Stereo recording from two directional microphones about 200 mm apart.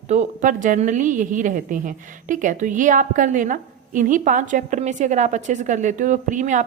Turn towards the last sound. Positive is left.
turn(degrees=-40)  # may be behind; listen again after turning